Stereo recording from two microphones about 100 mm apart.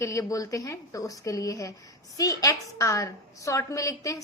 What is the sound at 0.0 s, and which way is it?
A woman's voice, 35° left (ahead or behind).